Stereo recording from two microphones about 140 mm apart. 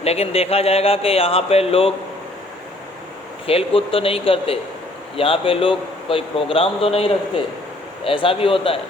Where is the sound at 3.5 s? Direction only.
45° left (ahead or behind).